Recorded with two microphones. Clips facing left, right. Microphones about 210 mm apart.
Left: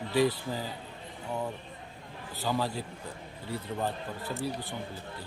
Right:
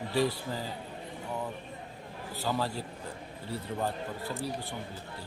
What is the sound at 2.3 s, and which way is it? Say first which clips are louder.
Speech: left 1 dB; centre (ahead or behind).